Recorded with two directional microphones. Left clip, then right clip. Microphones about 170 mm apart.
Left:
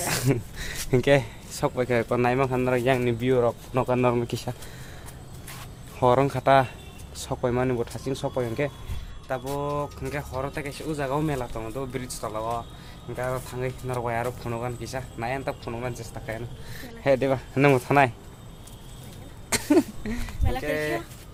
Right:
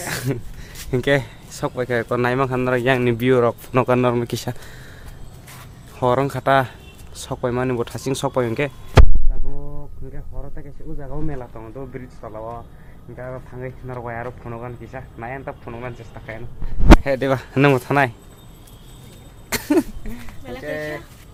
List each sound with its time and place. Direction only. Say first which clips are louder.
0.0 s a sound: even; centre (ahead or behind)
0.9 s speech: right 2 dB; 5° right (ahead or behind)
2.1 s speech: right 5 dB; 20° right (ahead or behind); by 4.0 s 35° right (ahead or behind)
4.0 s speech: right 4 dB; 20° right (ahead or behind)
6.0 s speech: right 2 dB; 15° right (ahead or behind)
7.8 s speech: right 6 dB; 35° right (ahead or behind)
8.3 s speech: right 7 dB; 50° right (ahead or behind)
9.6 s speech: left 11 dB; 35° left (ahead or behind); by 16.4 s 20° left (ahead or behind)
17.2 s speech: right 4 dB; 30° right (ahead or behind)
19.5 s a sound: right 2 dB; 15° right (ahead or behind)
20.1 s speech: left 2 dB; 70° left (ahead or behind)
20.7 s speech: even; 10° left (ahead or behind)